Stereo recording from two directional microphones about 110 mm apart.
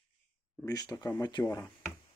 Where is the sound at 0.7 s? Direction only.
35° left (ahead or behind).